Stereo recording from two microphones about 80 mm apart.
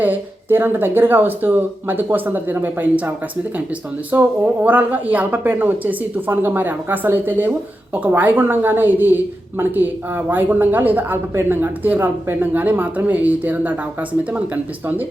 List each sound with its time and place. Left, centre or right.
0.0 s speech: right
4.1 s speech: right